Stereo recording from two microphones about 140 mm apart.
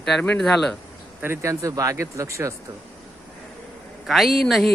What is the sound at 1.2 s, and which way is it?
Speech, 20° right (ahead or behind).